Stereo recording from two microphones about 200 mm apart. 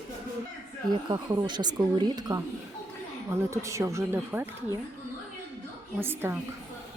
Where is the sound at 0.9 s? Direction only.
20° right (ahead or behind).